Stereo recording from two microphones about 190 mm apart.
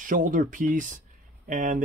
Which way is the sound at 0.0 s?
45° right (ahead or behind).